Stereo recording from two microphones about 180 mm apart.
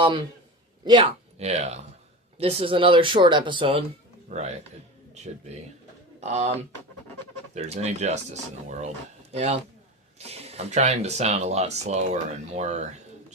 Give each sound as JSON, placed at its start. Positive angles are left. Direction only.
{"t": 0.9, "sound": "speech", "side_deg": -30}
{"t": 4.3, "sound": "speech", "side_deg": -40}
{"t": 6.1, "sound": "speech", "side_deg": -40}